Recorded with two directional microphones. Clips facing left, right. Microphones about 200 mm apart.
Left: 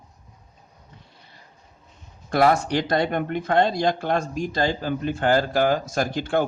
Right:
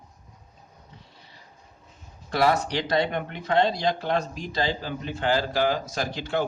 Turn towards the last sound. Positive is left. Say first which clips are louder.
# left 5 dB
turn(degrees=50)  # may be behind; listen again after turning